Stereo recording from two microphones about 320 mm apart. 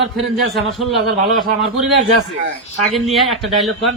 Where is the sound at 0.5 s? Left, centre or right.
Centre.